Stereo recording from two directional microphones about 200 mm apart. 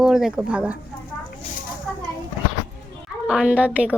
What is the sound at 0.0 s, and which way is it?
Speech, 5° right (ahead or behind).